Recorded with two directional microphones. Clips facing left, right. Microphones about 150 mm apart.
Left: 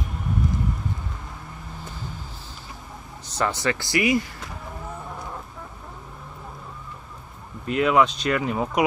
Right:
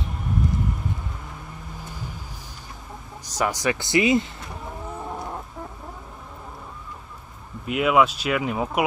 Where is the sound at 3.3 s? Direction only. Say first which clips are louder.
Right 1 dB; 10° right (ahead or behind).